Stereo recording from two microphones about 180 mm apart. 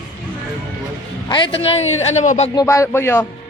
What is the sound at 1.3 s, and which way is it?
A man's voice, 30° left (ahead or behind).